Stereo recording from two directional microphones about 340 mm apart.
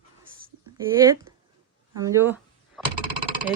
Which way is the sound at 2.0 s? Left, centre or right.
Centre.